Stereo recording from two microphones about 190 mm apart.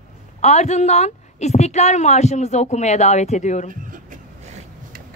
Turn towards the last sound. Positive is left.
turn(degrees=-45)  # may be behind; listen again after turning